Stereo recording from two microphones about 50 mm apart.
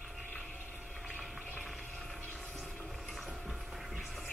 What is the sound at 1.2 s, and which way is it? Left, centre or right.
Vehicle, centre.